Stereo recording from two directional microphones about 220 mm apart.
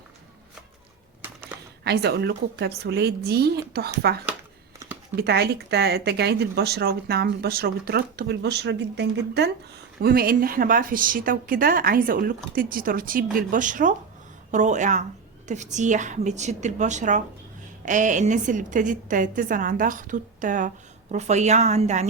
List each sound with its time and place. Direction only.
1.8 s a woman's voice: 50° right (ahead or behind); by 22.0 s 30° right (ahead or behind)